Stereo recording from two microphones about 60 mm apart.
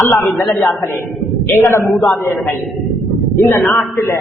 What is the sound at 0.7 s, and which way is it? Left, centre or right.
Speech, left.